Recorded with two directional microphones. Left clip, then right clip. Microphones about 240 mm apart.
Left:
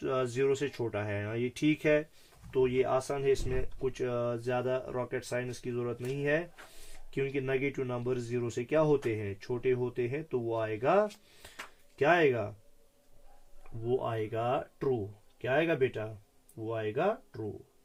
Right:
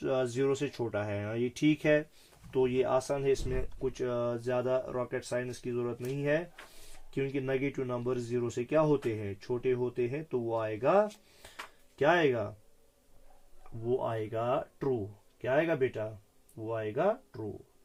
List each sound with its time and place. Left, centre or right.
0.0 s speech: centre
8.8 s speech: centre
9.2 s speech: centre
10.6 s speech: centre
11.9 s speech: centre
13.8 s speech: centre